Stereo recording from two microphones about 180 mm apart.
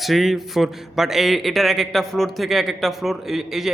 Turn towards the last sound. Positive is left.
turn(degrees=0)  # may be behind; listen again after turning